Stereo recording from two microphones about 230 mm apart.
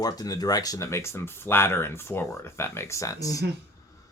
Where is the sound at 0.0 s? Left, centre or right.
Centre.